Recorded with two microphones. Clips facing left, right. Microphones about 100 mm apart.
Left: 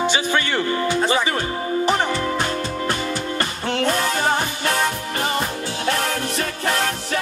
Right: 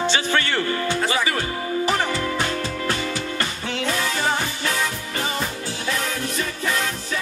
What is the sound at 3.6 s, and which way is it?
Music, 50° left (ahead or behind).